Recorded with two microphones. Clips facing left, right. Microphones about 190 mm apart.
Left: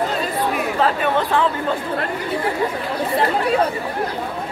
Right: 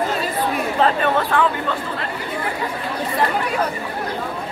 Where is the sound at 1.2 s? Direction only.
20° left (ahead or behind).